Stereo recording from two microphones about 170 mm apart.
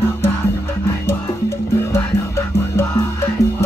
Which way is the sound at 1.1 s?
15° left (ahead or behind).